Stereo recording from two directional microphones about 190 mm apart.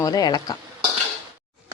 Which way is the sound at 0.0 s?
20° left (ahead or behind).